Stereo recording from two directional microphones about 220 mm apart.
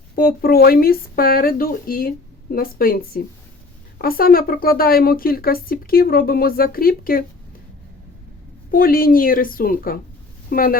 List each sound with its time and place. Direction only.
0.2 s speech: 40° left (ahead or behind)
8.7 s speech: 40° left (ahead or behind)